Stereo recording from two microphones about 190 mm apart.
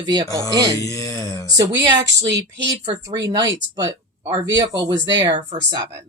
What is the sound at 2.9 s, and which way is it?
A woman's voice, 20° right (ahead or behind).